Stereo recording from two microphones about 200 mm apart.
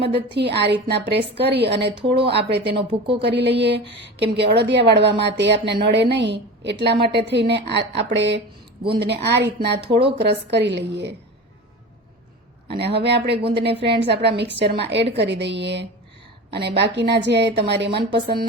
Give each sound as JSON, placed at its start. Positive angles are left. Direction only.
{"t": 0.3, "sound": "a woman's voice", "side_deg": -55}
{"t": 2.0, "sound": "speech", "side_deg": -30}
{"t": 2.3, "sound": "a woman's voice", "side_deg": -60}
{"t": 12.7, "sound": "a woman's voice", "side_deg": -55}